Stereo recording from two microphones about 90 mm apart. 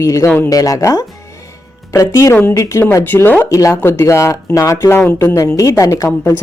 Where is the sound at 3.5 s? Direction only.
35° left (ahead or behind).